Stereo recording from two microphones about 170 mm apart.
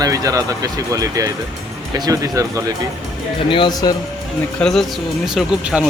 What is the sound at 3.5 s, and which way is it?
Speech, 25° left (ahead or behind).